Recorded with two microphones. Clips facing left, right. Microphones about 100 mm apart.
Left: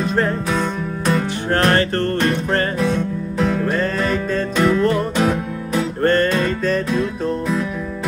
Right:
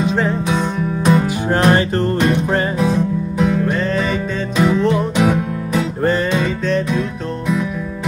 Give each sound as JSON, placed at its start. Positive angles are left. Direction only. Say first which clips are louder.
{"t": 0.1, "sound": "music", "louder": "right 1 dB", "side_deg": 0}
{"t": 1.6, "sound": "music", "louder": "right 2 dB", "side_deg": -10}